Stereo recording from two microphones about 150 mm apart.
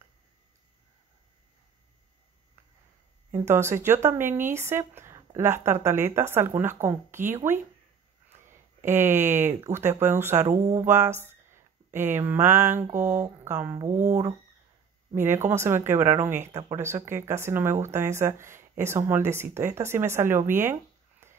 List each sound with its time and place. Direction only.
3.3 s speech: 15° right (ahead or behind)
8.8 s speech: 15° right (ahead or behind)